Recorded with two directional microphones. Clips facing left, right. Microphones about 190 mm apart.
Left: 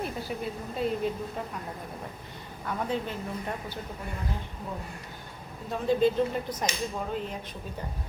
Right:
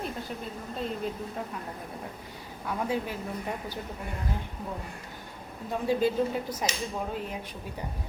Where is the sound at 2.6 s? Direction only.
5° right (ahead or behind).